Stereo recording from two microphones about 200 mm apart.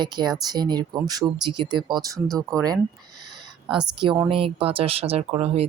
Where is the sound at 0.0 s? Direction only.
20° right (ahead or behind).